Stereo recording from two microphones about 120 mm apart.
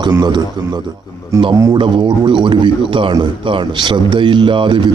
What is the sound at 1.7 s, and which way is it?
A man's voice, 40° right (ahead or behind).